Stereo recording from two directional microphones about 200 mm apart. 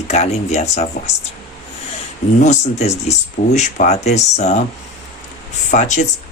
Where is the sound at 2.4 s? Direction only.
35° left (ahead or behind).